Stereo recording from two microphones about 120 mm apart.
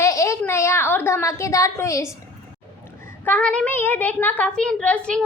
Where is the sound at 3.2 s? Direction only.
10° left (ahead or behind).